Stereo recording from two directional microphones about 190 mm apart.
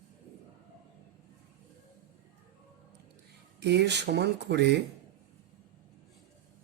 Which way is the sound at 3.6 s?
65° right (ahead or behind).